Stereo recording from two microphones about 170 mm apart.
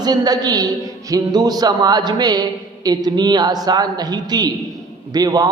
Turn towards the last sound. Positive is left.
turn(degrees=-25)  # may be behind; listen again after turning